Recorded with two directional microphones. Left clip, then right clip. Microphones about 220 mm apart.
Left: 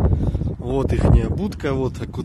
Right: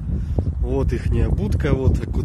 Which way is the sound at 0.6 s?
30° left (ahead or behind).